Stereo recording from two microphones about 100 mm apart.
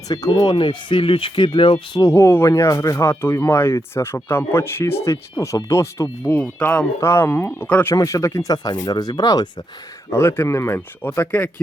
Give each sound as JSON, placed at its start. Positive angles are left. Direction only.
{"t": 0.1, "sound": "speech", "side_deg": 40}
{"t": 2.0, "sound": "speech", "side_deg": 30}
{"t": 6.3, "sound": "speech", "side_deg": 15}
{"t": 7.9, "sound": "speech", "side_deg": 30}
{"t": 10.1, "sound": "speech", "side_deg": 25}